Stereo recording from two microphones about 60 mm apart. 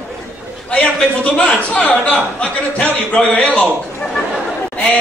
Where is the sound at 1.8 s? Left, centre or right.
Centre.